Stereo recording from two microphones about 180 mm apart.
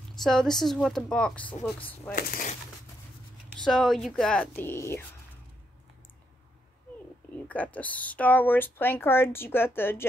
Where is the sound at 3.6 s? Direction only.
Centre (ahead or behind).